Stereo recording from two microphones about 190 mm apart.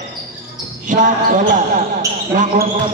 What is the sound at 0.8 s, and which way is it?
Basketball bounce, 45° right (ahead or behind).